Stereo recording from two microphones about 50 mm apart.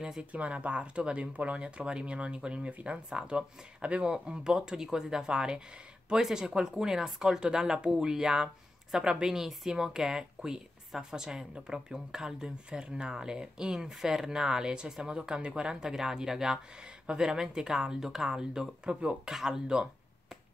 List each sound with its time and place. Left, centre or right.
0.2 s speech: right
19.2 s speech: centre